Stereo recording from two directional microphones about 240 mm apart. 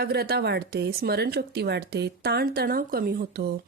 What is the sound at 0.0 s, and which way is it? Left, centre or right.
A woman's voice, right.